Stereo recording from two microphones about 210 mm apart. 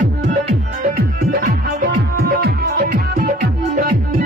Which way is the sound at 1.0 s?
45° right (ahead or behind).